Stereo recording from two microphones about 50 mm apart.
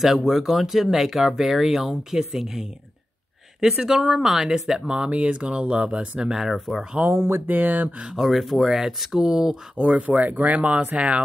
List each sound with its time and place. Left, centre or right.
0.0 s speech: centre
3.8 s speech: centre
6.3 s speech: centre
7.1 s speech: right
7.4 s speech: right
8.2 s speech: centre
9.8 s speech: right